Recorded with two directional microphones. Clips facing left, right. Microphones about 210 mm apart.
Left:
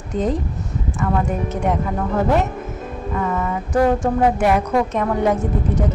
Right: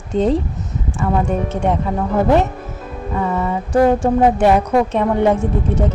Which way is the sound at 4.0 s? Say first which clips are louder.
Right 4 dB; 30° right (ahead or behind).